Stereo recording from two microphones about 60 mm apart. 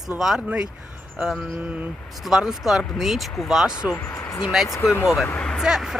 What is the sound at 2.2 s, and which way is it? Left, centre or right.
Speech, centre.